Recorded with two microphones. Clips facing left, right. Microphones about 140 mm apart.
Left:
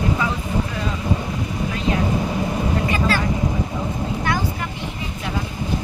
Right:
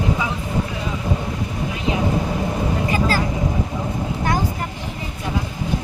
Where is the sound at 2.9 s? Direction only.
40° right (ahead or behind).